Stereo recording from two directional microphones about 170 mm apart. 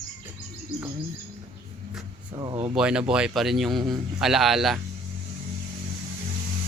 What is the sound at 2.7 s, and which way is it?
Speech, 5° right (ahead or behind).